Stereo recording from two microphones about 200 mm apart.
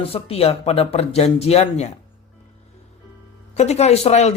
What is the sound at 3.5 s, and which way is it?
Speech, 35° left (ahead or behind).